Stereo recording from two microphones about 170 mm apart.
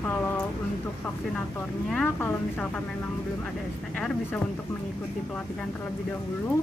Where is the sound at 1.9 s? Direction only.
10° left (ahead or behind).